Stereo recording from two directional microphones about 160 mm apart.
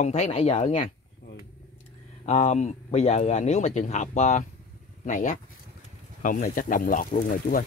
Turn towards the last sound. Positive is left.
turn(degrees=60)  # may be behind; listen again after turning